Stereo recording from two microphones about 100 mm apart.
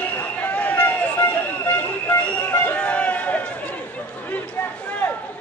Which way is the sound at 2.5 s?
20° left (ahead or behind).